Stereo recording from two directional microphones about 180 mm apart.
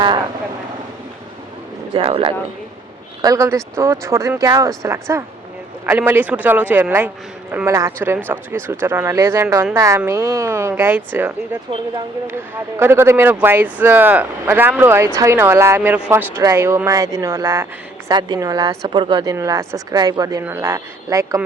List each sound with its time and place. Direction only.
1.9 s speech: 30° right (ahead or behind)
3.2 s speech: 20° right (ahead or behind)
12.3 s speech: 15° right (ahead or behind)